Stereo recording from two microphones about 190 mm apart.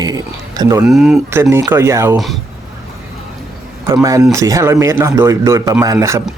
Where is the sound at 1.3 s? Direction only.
15° right (ahead or behind).